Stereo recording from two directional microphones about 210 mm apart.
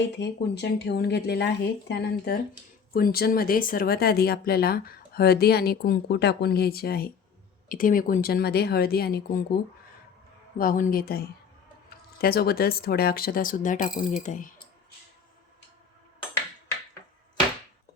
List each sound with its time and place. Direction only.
0.2 s speech: 55° left (ahead or behind)
10.6 s speech: 40° left (ahead or behind)
12.2 s speech: 45° left (ahead or behind)